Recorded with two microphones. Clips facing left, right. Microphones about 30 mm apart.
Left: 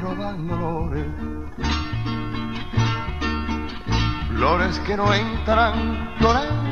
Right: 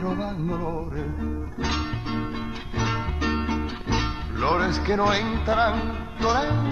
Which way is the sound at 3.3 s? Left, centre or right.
Centre.